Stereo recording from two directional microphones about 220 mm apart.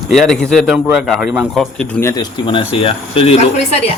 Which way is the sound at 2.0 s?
20° left (ahead or behind).